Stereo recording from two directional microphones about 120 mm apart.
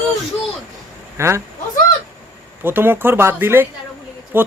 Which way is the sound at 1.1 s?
25° right (ahead or behind).